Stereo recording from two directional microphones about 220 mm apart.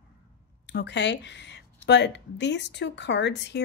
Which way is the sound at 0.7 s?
50° left (ahead or behind).